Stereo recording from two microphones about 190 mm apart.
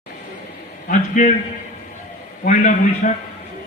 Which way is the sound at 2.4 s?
40° left (ahead or behind).